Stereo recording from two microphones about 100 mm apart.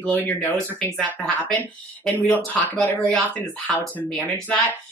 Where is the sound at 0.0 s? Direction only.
15° left (ahead or behind).